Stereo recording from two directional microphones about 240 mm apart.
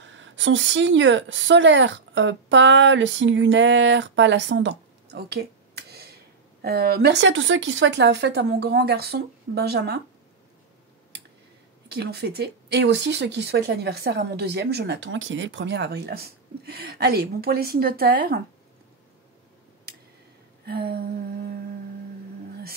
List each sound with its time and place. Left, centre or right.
0.0 s a woman's voice: right
11.9 s speech: right
20.6 s a sound: right